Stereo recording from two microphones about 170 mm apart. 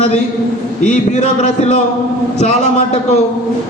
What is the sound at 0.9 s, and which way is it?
A man's voice, 45° left (ahead or behind).